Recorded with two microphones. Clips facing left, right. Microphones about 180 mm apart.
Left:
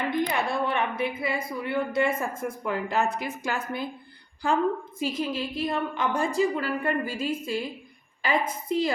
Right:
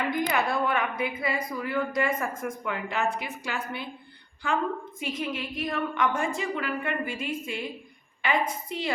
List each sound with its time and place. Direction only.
0.1 s a woman's voice: 25° left (ahead or behind)